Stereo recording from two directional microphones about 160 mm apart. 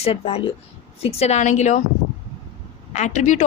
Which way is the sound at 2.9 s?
50° left (ahead or behind).